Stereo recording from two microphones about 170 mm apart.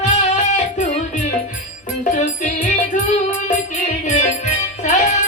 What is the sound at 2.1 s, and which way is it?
Music, 50° left (ahead or behind).